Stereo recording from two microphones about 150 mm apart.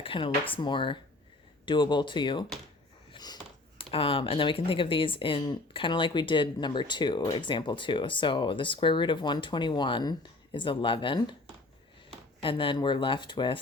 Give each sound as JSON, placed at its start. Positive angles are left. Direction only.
{"t": 0.0, "sound": "speech", "side_deg": 35}
{"t": 3.1, "sound": "a sound", "side_deg": 25}
{"t": 3.8, "sound": "speech", "side_deg": 40}
{"t": 12.4, "sound": "speech", "side_deg": 35}